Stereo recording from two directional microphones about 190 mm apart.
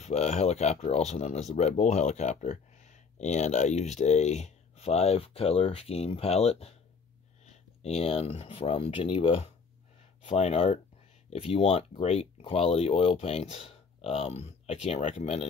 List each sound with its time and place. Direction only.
0.0 s speech: 35° left (ahead or behind)
7.8 s speech: 30° left (ahead or behind)